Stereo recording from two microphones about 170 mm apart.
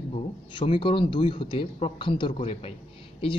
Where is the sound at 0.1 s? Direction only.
30° left (ahead or behind).